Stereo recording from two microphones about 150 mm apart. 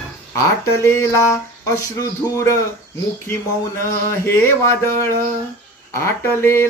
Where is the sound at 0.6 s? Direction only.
20° left (ahead or behind).